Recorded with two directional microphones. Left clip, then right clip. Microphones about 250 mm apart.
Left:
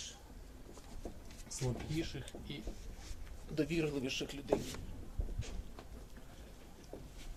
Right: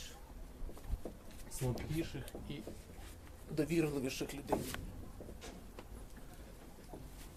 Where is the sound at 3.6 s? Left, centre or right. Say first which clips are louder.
Right 1 dB; centre.